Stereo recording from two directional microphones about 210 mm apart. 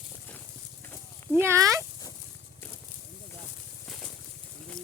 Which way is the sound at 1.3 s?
10° right (ahead or behind).